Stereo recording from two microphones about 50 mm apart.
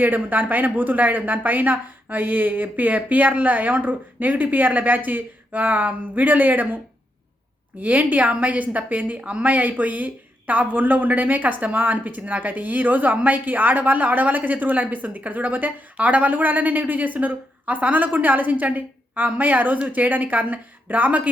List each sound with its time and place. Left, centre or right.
0.0 s a woman's voice: right
7.8 s a woman's voice: right